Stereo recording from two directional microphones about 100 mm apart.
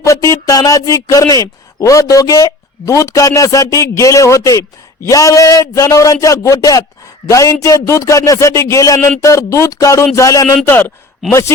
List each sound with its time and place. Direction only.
0.0 s speech: 30° left (ahead or behind)
10.7 s a man's voice: 20° left (ahead or behind)